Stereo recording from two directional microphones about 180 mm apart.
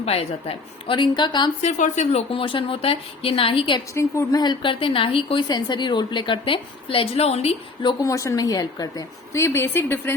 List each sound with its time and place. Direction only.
0.0 s a woman's voice: 35° left (ahead or behind)
1.6 s a woman's voice: 40° left (ahead or behind)
3.9 s a woman's voice: 15° left (ahead or behind); by 7.5 s 35° left (ahead or behind)
7.8 s a woman's voice: 20° left (ahead or behind)